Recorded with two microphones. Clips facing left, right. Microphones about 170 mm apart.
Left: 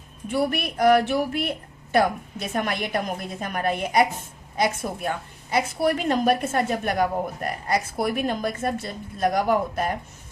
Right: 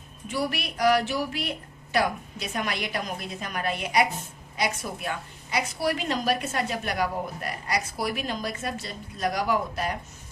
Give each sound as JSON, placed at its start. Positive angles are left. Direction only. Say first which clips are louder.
{"t": 0.3, "sound": "a woman's voice", "louder": "left 5 dB", "side_deg": 50}